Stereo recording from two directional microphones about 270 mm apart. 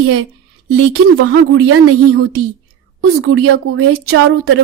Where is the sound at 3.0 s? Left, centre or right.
Right.